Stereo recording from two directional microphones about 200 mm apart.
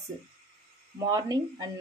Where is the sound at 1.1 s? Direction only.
20° right (ahead or behind).